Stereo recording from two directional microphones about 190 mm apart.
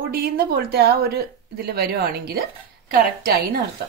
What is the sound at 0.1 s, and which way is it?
Speech, 55° right (ahead or behind).